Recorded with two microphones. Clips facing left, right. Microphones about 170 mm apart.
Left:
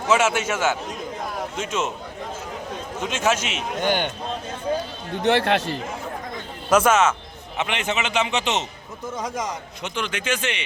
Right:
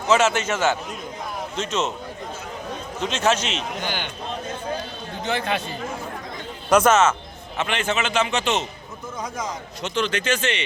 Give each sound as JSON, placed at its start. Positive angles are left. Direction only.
{"t": 0.1, "sound": "a man's voice", "side_deg": 10}
{"t": 3.0, "sound": "a man's voice", "side_deg": 10}
{"t": 3.8, "sound": "a man's voice", "side_deg": 55}
{"t": 5.2, "sound": "speech", "side_deg": 75}
{"t": 6.7, "sound": "a man's voice", "side_deg": 5}
{"t": 9.8, "sound": "a man's voice", "side_deg": 10}